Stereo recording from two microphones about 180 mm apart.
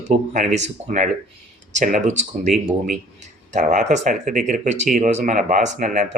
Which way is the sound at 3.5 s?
45° right (ahead or behind).